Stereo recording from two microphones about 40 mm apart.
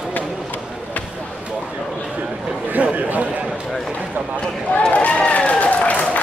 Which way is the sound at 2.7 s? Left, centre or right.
Right.